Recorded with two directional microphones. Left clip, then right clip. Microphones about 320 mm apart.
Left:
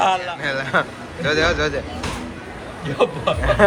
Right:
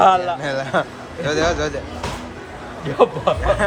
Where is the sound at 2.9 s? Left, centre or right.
Right.